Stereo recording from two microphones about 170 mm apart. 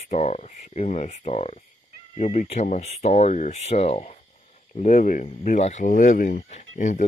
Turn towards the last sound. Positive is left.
turn(degrees=45)  # may be behind; listen again after turning